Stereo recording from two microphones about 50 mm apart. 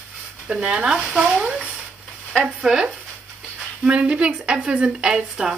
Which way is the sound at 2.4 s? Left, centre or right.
Centre.